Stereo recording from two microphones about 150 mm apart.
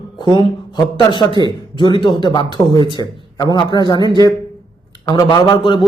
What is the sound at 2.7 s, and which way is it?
Speech, 35° right (ahead or behind).